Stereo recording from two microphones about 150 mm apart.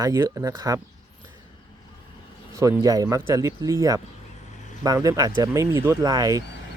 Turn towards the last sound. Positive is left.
turn(degrees=-25)  # may be behind; listen again after turning